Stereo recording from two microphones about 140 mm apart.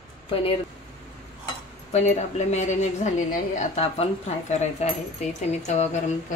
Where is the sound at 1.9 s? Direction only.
55° left (ahead or behind).